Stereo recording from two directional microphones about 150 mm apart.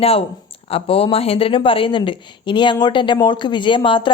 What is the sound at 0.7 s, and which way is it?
Speech, 40° left (ahead or behind).